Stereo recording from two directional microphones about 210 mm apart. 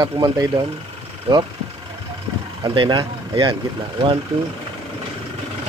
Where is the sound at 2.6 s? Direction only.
20° right (ahead or behind).